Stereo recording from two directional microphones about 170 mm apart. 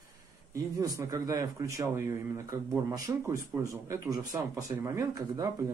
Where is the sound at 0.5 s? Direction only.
20° right (ahead or behind).